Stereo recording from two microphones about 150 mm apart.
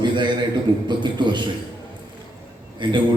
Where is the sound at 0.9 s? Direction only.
30° right (ahead or behind).